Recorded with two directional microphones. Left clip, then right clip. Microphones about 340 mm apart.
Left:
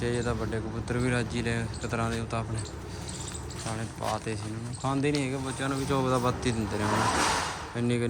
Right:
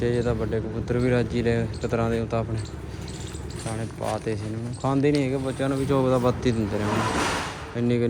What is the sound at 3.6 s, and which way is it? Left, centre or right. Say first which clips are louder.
Speech: right 3 dB; centre.